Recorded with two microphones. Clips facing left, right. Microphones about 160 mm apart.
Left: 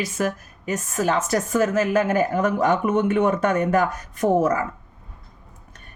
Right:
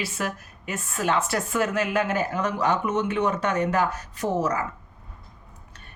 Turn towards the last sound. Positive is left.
turn(degrees=55)  # may be behind; listen again after turning